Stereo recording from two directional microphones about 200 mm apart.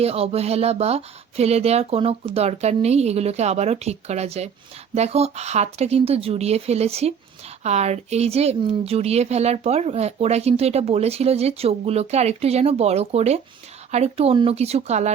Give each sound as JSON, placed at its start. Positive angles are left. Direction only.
{"t": 0.0, "sound": "speech", "side_deg": -30}